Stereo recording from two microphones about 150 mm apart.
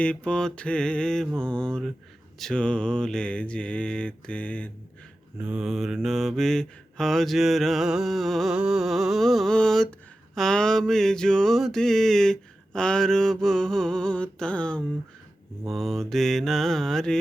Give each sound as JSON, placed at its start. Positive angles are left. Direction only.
{"t": 0.0, "sound": "mantra", "side_deg": 5}
{"t": 5.4, "sound": "mantra", "side_deg": -5}